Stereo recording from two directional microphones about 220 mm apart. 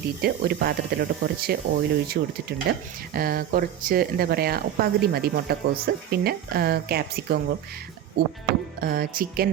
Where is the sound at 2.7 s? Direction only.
40° right (ahead or behind).